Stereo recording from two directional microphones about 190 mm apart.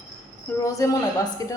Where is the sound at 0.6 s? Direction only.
15° left (ahead or behind).